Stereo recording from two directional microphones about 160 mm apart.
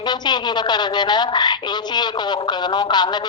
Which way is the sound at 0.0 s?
25° left (ahead or behind).